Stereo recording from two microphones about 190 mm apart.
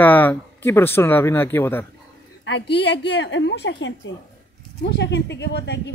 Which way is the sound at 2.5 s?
70° left (ahead or behind).